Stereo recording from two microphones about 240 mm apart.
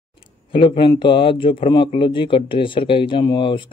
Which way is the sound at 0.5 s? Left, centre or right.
Left.